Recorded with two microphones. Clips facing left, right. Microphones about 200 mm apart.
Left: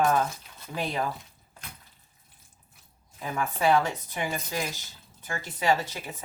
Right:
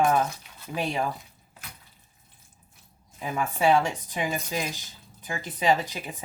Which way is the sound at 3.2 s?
15° right (ahead or behind).